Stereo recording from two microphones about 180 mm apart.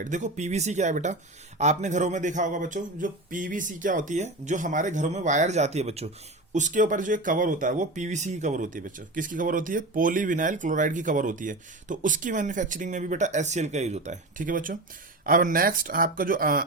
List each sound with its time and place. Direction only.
0.0 s speech: 45° right (ahead or behind)